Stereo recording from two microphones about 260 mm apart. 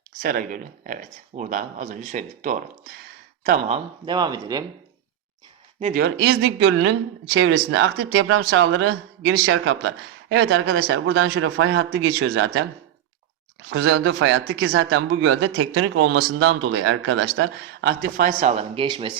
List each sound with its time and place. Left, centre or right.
0.2 s speech: right
4.0 s speech: centre
5.8 s speech: right
13.7 s speech: right; by 19.1 s centre